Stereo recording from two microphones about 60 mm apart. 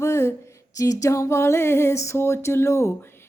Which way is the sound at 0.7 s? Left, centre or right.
Left.